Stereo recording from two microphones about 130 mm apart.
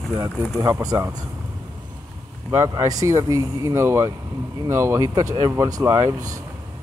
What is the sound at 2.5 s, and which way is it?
Speech, 20° right (ahead or behind).